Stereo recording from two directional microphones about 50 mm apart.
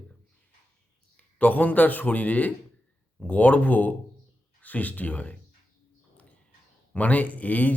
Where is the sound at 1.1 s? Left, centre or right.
Left.